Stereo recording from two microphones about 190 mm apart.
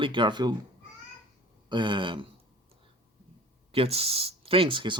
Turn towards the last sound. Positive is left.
turn(degrees=-25)  # may be behind; listen again after turning